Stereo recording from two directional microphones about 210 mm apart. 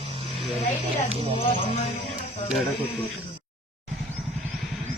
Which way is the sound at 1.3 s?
25° left (ahead or behind).